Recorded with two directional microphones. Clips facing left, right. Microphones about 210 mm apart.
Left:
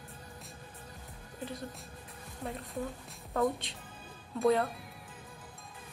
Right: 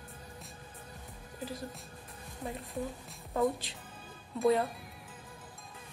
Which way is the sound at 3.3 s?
Centre (ahead or behind).